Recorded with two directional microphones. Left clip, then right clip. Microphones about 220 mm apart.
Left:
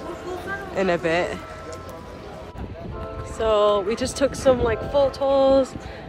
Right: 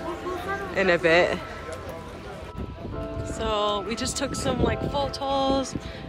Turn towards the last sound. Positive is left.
turn(degrees=-5)  # may be behind; listen again after turning